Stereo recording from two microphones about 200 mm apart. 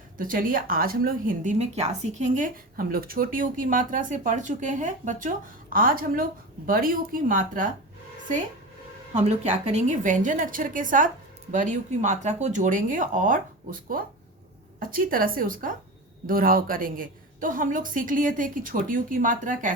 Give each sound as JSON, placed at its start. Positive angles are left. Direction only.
{"t": 0.2, "sound": "a woman's voice", "side_deg": -45}
{"t": 9.1, "sound": "a woman's voice", "side_deg": -35}